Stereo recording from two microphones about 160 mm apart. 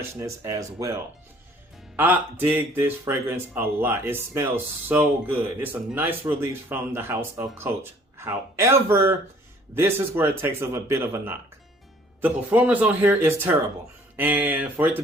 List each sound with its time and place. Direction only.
0.2 s speech: 20° right (ahead or behind)